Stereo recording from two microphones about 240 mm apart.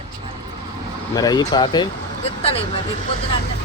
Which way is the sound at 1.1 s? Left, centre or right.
Centre.